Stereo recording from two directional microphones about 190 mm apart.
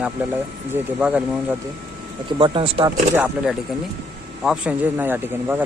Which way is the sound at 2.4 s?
30° right (ahead or behind).